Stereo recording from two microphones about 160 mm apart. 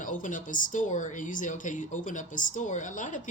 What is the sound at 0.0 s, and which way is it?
Speech, 55° left (ahead or behind).